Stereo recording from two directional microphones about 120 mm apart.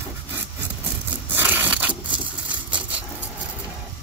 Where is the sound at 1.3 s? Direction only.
15° right (ahead or behind).